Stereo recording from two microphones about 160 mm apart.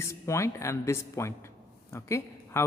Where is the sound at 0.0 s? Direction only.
20° left (ahead or behind).